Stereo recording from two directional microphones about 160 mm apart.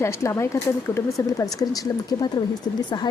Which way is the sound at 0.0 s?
20° left (ahead or behind).